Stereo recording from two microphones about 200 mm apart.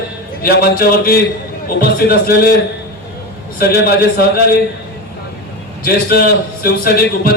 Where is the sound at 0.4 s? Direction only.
50° left (ahead or behind).